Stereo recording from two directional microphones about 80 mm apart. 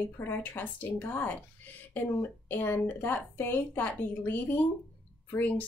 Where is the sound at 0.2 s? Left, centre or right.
Left.